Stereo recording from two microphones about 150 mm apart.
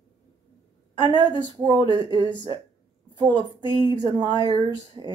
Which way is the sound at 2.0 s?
30° right (ahead or behind).